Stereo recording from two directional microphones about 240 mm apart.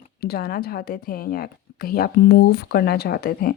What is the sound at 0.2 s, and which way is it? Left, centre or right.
A woman's voice, left.